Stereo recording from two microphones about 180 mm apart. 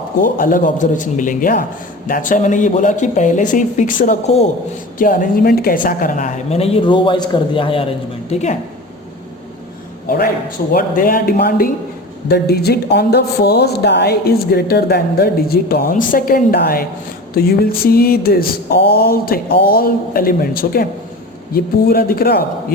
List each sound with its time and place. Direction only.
0.2 s speech: 50° left (ahead or behind)
4.9 s a woman's voice: 50° left (ahead or behind)
10.7 s speech: 50° left (ahead or behind)